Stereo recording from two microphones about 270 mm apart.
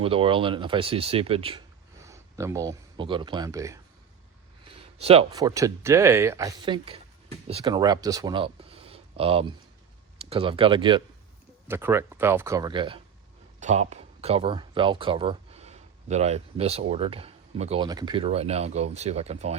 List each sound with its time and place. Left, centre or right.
0.0 s speech: centre